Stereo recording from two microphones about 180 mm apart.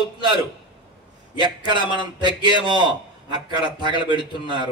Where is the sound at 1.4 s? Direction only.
25° right (ahead or behind).